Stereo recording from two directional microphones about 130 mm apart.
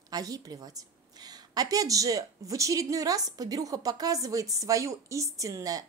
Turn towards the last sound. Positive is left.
turn(degrees=-25)  # may be behind; listen again after turning